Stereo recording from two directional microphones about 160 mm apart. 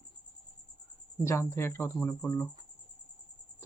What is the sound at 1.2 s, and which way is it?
Speech, 15° left (ahead or behind).